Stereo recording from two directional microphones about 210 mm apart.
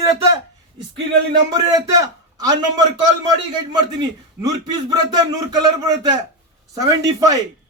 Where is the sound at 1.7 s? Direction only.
15° right (ahead or behind).